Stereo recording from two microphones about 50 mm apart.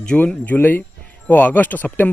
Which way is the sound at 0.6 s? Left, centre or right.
Left.